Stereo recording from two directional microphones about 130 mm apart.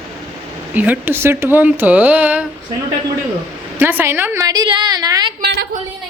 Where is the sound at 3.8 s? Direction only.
15° right (ahead or behind).